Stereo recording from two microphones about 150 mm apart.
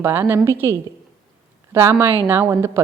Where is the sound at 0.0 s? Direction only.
15° right (ahead or behind).